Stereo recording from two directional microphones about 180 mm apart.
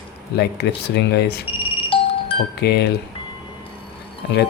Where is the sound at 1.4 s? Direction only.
30° left (ahead or behind).